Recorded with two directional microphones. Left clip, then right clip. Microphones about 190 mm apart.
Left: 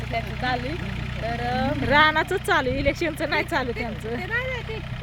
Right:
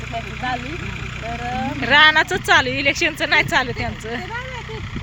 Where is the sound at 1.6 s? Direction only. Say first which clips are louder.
Right 6 dB; 5° left (ahead or behind).